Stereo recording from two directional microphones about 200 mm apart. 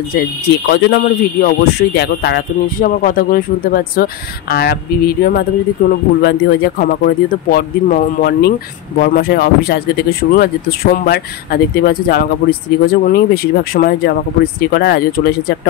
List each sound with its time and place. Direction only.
0.7 s speech: 55° left (ahead or behind)